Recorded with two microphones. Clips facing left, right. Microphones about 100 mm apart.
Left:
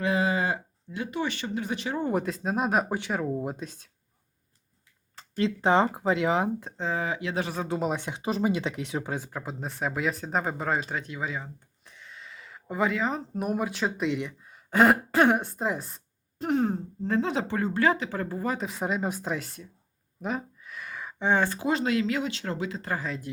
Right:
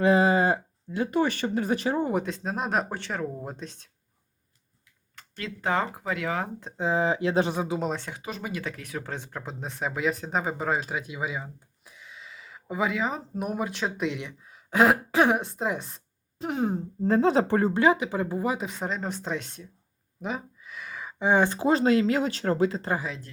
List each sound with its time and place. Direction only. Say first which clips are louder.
0.0 s speech: right 5 dB; 35° right (ahead or behind)
2.0 s speech: left 1 dB; centre (ahead or behind)
5.4 s speech: left 5 dB; 25° left (ahead or behind)
6.7 s speech: right 7 dB; 15° right (ahead or behind)
7.0 s speech: right 6 dB; 30° right (ahead or behind)
7.7 s speech: left 1 dB; 5° left (ahead or behind)
8.2 s speech: left 7 dB; 25° left (ahead or behind)
9.0 s speech: left 2 dB; 5° left (ahead or behind)
17.0 s speech: right 6 dB; 35° right (ahead or behind)
17.7 s speech: right 3 dB; 15° right (ahead or behind)
18.6 s speech: left 2 dB; 5° left (ahead or behind)
20.2 s a sound: left 1 dB; centre (ahead or behind); by 21.6 s 15° right (ahead or behind)
21.6 s speech: right 4 dB; 35° right (ahead or behind)
23.0 s speech: even; centre (ahead or behind)